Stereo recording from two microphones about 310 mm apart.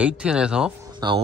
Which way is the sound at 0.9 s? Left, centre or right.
Centre.